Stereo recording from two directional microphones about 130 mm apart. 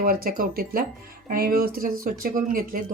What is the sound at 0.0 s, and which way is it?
Speech, 90° right.